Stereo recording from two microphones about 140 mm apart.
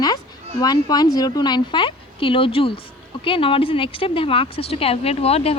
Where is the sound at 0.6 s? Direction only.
30° left (ahead or behind).